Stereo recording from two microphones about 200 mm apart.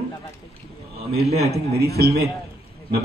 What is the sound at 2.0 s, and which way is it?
Speech, 50° right (ahead or behind).